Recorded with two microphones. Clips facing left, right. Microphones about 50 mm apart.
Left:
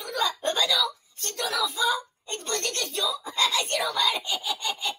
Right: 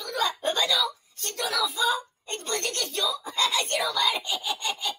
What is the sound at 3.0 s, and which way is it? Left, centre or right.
Sawing, centre.